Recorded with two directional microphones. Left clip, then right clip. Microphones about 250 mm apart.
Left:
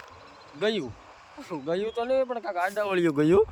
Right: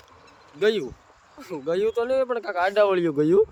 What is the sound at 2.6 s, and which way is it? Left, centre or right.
Speech, right.